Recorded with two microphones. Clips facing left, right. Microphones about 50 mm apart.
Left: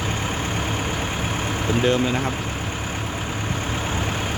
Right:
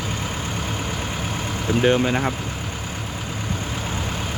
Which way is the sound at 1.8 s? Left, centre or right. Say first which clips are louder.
Right 3 dB; centre.